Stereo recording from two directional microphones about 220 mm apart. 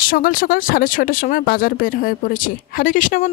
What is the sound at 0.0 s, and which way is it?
Speech, 40° left (ahead or behind).